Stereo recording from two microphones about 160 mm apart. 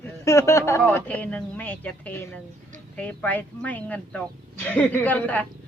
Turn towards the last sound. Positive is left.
turn(degrees=10)  # may be behind; listen again after turning